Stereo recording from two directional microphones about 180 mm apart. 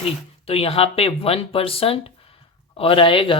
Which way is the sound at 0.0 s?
30° left (ahead or behind).